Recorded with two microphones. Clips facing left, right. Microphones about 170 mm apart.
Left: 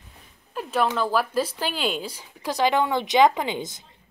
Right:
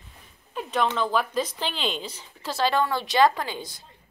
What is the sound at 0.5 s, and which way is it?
Speech, 5° left (ahead or behind).